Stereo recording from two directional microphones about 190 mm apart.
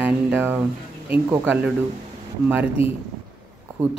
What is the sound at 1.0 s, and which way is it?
Speech, 10° right (ahead or behind).